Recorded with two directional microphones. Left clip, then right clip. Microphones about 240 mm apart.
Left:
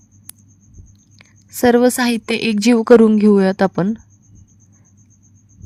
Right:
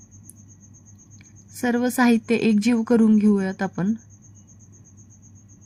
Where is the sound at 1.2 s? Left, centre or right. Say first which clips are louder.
Left 11 dB; left.